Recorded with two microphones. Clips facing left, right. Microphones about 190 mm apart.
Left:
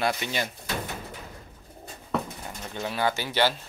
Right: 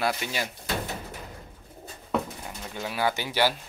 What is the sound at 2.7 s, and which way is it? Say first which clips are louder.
Speech: left 1 dB; 5° right (ahead or behind).